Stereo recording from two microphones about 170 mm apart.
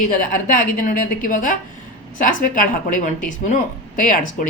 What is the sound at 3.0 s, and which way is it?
Speech, 50° left (ahead or behind).